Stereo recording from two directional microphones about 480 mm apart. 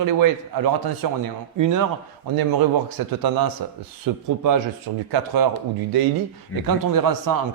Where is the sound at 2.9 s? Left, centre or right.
Right.